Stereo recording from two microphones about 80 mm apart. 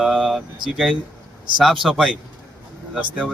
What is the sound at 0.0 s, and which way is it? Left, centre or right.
Speech, centre.